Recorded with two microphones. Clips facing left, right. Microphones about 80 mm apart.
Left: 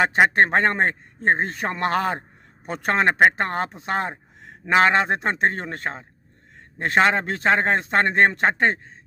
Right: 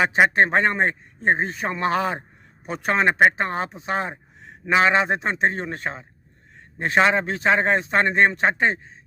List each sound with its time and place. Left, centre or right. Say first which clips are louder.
0.0 s speech: even; left